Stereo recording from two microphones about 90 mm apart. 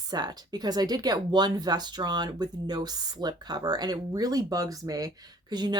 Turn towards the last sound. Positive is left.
turn(degrees=-50)  # may be behind; listen again after turning